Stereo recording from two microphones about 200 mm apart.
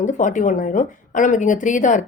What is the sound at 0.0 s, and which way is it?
A woman's voice, 40° left (ahead or behind).